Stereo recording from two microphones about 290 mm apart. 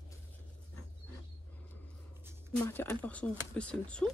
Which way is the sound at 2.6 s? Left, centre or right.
Centre.